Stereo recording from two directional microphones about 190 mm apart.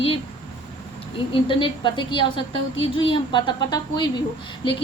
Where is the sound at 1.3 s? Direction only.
25° left (ahead or behind).